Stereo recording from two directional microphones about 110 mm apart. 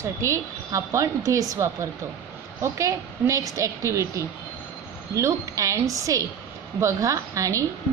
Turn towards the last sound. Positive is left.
turn(degrees=-30)  # may be behind; listen again after turning